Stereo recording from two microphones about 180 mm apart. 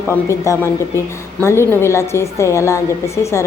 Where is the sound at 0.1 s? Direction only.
15° left (ahead or behind).